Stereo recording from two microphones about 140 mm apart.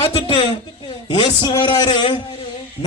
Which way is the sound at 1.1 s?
30° left (ahead or behind).